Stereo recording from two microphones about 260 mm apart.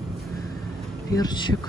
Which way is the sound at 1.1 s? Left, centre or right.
Centre.